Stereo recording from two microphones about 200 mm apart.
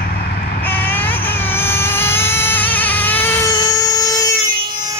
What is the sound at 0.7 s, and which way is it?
Vehicle, 10° left (ahead or behind).